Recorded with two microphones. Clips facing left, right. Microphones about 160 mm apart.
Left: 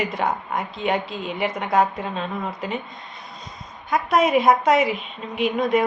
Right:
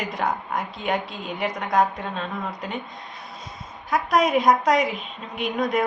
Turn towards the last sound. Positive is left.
turn(degrees=0)  # may be behind; listen again after turning